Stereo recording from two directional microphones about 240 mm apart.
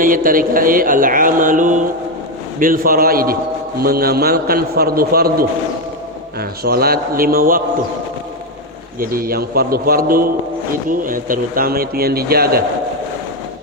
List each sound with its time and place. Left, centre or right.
0.0 s a man's voice: right
9.0 s a man's voice: right